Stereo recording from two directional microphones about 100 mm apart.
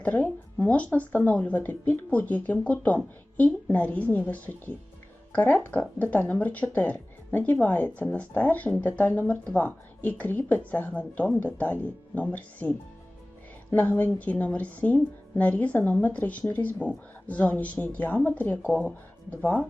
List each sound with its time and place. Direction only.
0.0 s speech: 15° left (ahead or behind)